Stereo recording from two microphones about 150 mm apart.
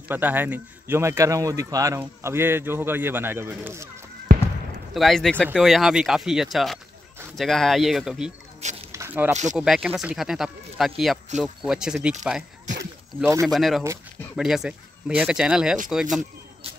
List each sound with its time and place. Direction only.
0.1 s a man's voice: 10° right (ahead or behind)
4.9 s speech: centre (ahead or behind)
8.9 s squish: 15° right (ahead or behind)
9.6 s speech: 5° right (ahead or behind)
13.2 s speech: 20° right (ahead or behind)
13.5 s speech: centre (ahead or behind)